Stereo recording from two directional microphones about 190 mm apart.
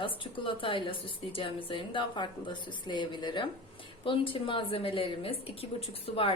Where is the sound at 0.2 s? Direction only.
25° left (ahead or behind).